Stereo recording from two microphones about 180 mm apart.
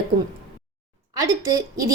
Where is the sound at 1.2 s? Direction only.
20° right (ahead or behind).